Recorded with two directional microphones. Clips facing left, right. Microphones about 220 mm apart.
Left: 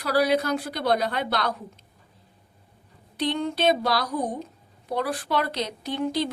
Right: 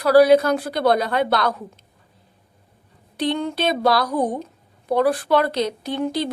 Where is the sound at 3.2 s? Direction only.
55° right (ahead or behind).